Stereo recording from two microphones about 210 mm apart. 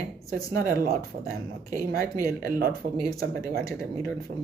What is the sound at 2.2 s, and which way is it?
Speech, 45° right (ahead or behind).